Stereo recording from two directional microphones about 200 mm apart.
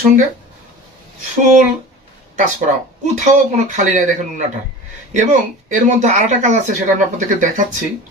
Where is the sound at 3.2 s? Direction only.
40° right (ahead or behind).